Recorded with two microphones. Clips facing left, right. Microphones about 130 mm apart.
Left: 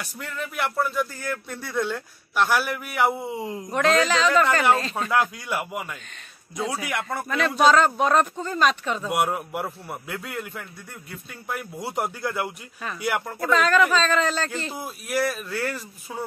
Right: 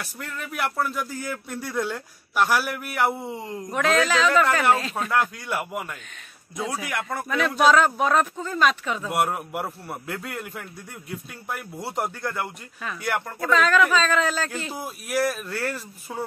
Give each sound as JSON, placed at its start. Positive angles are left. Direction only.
{"t": 0.0, "sound": "speech", "side_deg": 0}